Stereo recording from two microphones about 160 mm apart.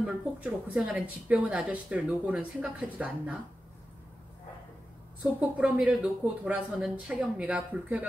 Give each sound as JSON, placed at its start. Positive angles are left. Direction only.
{"t": 0.0, "sound": "a woman's voice", "side_deg": -5}
{"t": 5.2, "sound": "a woman's voice", "side_deg": -5}